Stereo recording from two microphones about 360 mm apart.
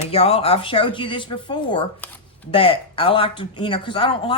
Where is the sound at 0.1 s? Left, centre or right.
Centre.